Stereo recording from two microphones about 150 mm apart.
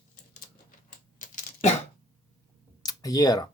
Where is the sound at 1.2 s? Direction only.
60° left (ahead or behind).